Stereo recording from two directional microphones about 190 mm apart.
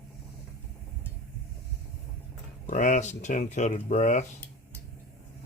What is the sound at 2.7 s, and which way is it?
Speech, 40° left (ahead or behind).